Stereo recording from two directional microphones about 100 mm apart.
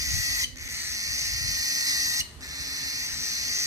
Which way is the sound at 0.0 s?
35° right (ahead or behind).